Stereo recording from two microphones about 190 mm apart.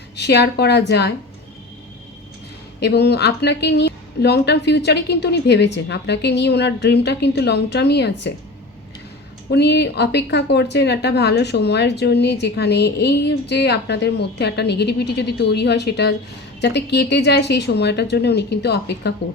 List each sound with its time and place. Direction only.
0.2 s speech: 60° left (ahead or behind)
2.8 s speech: 60° left (ahead or behind)
9.5 s speech: 60° left (ahead or behind)